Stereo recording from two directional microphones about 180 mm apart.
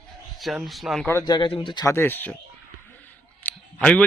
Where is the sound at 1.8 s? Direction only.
15° left (ahead or behind).